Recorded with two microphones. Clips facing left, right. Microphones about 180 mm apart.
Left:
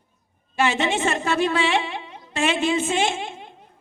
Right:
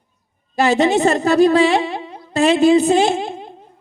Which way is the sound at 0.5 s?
40° right (ahead or behind).